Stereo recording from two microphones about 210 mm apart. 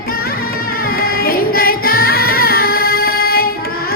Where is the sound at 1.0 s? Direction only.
45° left (ahead or behind).